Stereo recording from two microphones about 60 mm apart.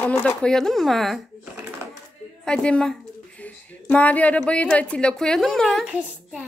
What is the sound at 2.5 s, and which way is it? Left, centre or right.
A woman's voice, centre.